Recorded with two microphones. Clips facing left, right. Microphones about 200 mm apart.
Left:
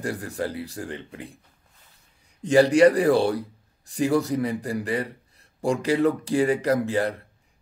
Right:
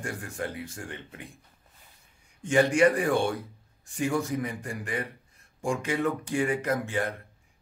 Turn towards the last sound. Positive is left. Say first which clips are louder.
# left 6 dB
turn(degrees=35)  # may be behind; listen again after turning